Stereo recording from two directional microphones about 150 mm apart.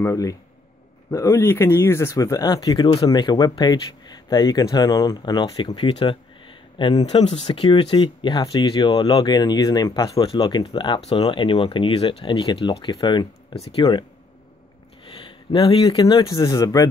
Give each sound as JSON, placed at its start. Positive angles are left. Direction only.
{"t": 0.0, "sound": "speech", "side_deg": 20}
{"t": 5.8, "sound": "a sound", "side_deg": 35}
{"t": 7.0, "sound": "speech", "side_deg": 45}
{"t": 7.4, "sound": "speech", "side_deg": 30}
{"t": 15.0, "sound": "speech", "side_deg": 35}